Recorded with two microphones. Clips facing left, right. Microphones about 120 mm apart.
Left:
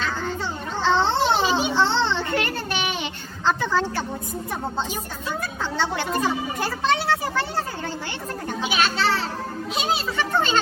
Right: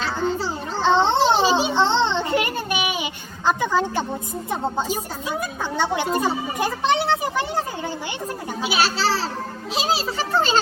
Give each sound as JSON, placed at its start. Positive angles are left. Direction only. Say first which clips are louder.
{"t": 0.8, "sound": "children playing", "louder": "right 3 dB", "side_deg": -20}
{"t": 5.3, "sound": "a child's voice", "louder": "right 2 dB", "side_deg": -15}
{"t": 8.7, "sound": "a child's voice", "louder": "right 1 dB", "side_deg": -35}